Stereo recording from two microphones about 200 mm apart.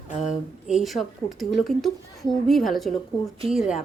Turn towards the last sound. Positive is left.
turn(degrees=-5)  # may be behind; listen again after turning